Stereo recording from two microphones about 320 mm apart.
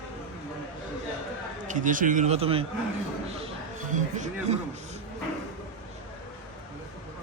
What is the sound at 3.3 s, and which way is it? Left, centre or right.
Music, centre.